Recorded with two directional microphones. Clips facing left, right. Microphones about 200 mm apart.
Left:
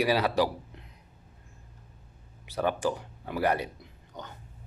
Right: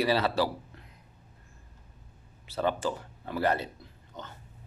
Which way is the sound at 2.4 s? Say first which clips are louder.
Left 1 dB; 15° left (ahead or behind).